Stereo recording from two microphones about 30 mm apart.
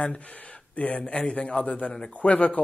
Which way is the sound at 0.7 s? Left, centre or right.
Left.